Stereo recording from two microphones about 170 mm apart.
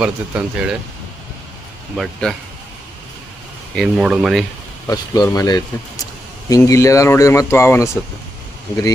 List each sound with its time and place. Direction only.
0.0 s speech: 5° right (ahead or behind)
2.0 s speech: 5° left (ahead or behind)
3.7 s speech: centre (ahead or behind)
4.8 s speech: 20° left (ahead or behind)